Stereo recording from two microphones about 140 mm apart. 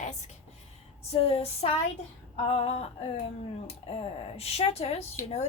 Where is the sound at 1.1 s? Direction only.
45° left (ahead or behind).